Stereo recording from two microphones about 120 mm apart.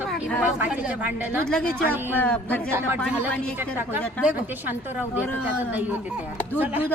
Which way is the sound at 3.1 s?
15° right (ahead or behind).